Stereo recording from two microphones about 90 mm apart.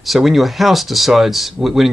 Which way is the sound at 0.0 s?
Centre (ahead or behind).